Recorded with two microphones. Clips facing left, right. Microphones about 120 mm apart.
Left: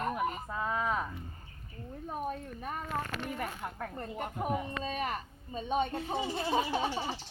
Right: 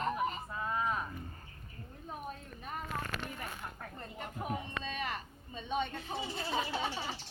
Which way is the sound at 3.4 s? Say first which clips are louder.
Left 6 dB; 55° left (ahead or behind).